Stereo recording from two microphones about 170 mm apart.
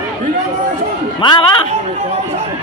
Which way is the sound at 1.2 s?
25° left (ahead or behind).